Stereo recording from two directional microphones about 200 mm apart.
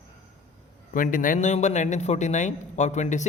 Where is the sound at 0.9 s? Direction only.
40° left (ahead or behind).